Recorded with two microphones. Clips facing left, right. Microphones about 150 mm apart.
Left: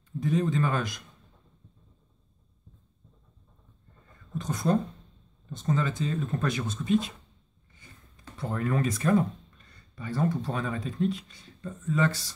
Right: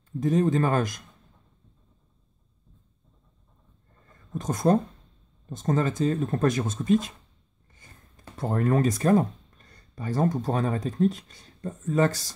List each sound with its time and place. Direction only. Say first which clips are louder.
0.2 s speech: right 4 dB; 45° right (ahead or behind)
4.4 s speech: right 4 dB; 45° right (ahead or behind)
7.8 s a sound: even; 45° right (ahead or behind)
8.4 s speech: right 5 dB; 45° right (ahead or behind)